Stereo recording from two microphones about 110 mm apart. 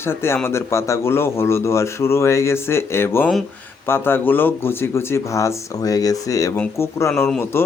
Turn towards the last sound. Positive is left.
turn(degrees=20)  # may be behind; listen again after turning